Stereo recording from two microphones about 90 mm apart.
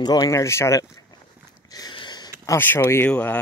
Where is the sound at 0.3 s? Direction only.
30° left (ahead or behind).